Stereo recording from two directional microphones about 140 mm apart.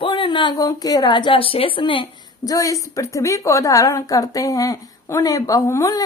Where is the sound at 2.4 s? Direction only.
25° left (ahead or behind).